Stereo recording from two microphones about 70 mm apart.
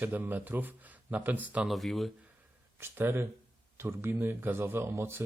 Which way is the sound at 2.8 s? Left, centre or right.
Right.